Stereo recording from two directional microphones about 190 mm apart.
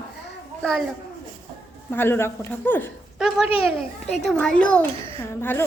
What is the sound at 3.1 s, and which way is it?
A woman's voice, 5° right (ahead or behind).